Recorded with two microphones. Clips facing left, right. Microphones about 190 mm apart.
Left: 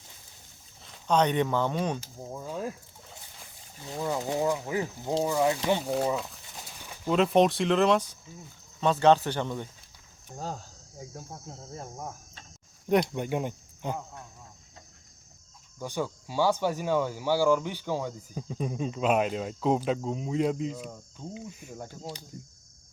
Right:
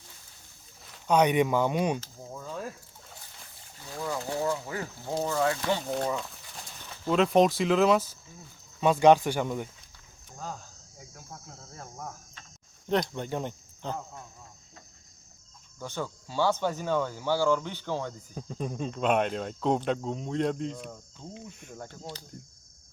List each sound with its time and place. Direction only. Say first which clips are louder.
1.0 s speech: right 2 dB; 10° right (ahead or behind)
2.0 s a sound: left 2 dB; 15° left (ahead or behind)
3.8 s speech: left 3 dB; 20° left (ahead or behind)
5.8 s a sound: left 2 dB; 5° left (ahead or behind)
7.1 s speech: even; centre (ahead or behind)
11.1 s cricket: left 2 dB; 25° left (ahead or behind)
12.9 s speech: left 3 dB; 10° left (ahead or behind)
15.8 s speech: left 3 dB; 15° left (ahead or behind)